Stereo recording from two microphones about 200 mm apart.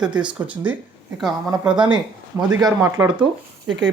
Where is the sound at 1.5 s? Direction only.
20° right (ahead or behind).